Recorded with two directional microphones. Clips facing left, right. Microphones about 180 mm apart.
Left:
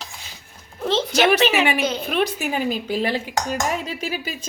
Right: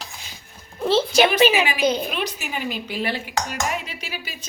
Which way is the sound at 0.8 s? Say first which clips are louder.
Even; 10° right (ahead or behind).